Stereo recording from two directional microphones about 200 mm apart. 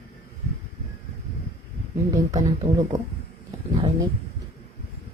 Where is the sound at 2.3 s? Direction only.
35° right (ahead or behind).